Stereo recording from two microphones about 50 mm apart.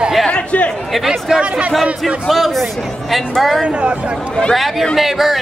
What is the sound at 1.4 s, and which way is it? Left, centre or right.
Speech, right.